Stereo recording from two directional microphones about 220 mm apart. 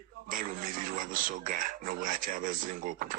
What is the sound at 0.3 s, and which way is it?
Speech, 40° right (ahead or behind).